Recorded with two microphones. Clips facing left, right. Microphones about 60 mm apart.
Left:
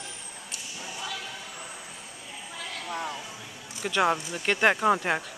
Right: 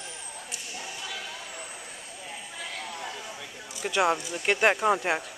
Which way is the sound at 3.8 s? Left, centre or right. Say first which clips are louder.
Even; centre.